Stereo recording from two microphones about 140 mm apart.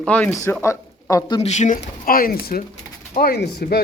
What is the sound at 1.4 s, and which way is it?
Speech, 55° left (ahead or behind).